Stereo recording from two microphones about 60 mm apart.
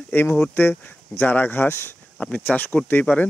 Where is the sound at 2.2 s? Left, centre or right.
Left.